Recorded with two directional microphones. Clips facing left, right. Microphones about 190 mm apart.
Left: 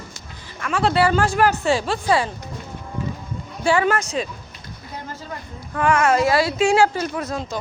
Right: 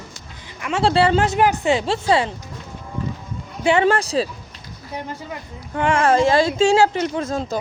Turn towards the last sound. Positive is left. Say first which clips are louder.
# right 3 dB
turn(degrees=-30)  # may be behind; listen again after turning